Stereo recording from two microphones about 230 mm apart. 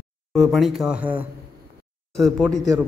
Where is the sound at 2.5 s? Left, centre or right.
Centre.